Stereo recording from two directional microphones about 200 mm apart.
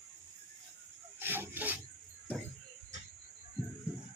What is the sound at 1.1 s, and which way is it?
Rub, 10° right (ahead or behind).